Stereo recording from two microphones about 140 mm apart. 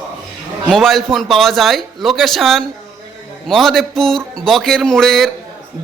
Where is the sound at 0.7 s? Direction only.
Centre (ahead or behind).